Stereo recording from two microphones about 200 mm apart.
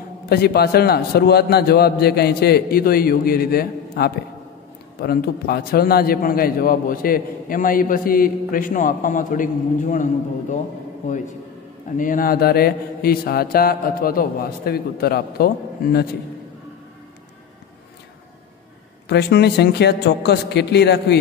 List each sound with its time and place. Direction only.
0.3 s a man's voice: 50° left (ahead or behind)
19.0 s a man's voice: 55° left (ahead or behind)